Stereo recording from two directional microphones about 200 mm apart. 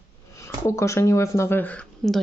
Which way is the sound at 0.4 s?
15° left (ahead or behind).